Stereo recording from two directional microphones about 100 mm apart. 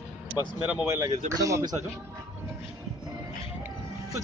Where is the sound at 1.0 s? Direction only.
35° right (ahead or behind).